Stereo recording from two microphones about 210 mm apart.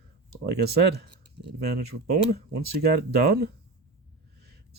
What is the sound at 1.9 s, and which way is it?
Speech, 90° right.